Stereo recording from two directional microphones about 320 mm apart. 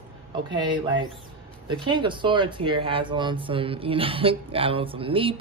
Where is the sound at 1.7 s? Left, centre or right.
Centre.